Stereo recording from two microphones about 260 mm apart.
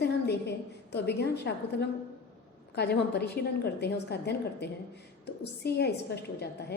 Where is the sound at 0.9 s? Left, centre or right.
Left.